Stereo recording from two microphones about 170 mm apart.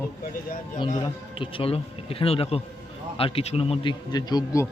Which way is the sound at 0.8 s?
25° left (ahead or behind).